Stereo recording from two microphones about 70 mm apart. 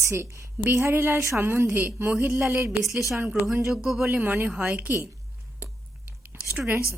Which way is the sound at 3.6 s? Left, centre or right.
Centre.